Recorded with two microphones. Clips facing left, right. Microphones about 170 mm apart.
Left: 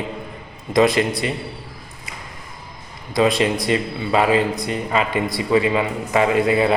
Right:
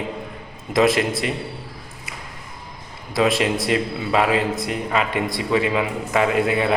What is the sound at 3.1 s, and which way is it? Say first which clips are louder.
A man's voice: left 2 dB; centre (ahead or behind).